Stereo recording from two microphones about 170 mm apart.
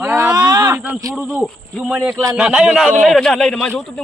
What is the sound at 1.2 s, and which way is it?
Speech, 5° right (ahead or behind).